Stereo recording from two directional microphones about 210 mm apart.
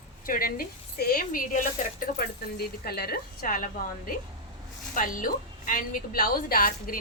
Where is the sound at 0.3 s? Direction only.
45° left (ahead or behind).